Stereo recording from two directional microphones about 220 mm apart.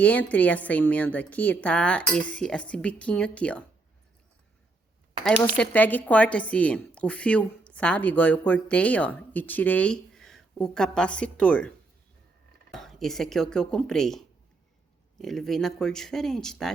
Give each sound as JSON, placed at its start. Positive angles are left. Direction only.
{"t": 0.0, "sound": "a woman's voice", "side_deg": 5}
{"t": 5.5, "sound": "a woman's voice", "side_deg": 5}
{"t": 12.7, "sound": "a woman's voice", "side_deg": 0}